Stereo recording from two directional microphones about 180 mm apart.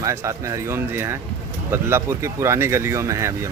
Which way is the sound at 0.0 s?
15° right (ahead or behind).